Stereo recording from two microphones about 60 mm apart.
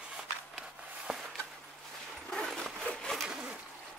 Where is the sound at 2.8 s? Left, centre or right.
Centre.